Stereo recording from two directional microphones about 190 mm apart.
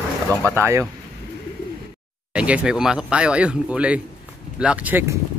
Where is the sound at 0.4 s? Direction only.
15° right (ahead or behind).